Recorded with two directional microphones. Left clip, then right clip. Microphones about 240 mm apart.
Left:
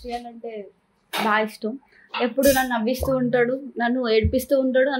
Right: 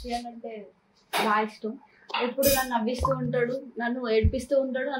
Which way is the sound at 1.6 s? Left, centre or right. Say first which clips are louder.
Left 5 dB; left.